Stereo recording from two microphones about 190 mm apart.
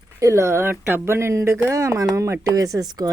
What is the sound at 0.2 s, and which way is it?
Speech, 15° right (ahead or behind).